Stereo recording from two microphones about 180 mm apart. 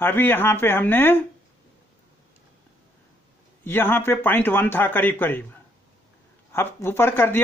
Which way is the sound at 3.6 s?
10° left (ahead or behind).